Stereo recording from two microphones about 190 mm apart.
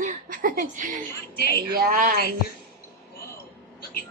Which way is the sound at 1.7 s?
45° right (ahead or behind).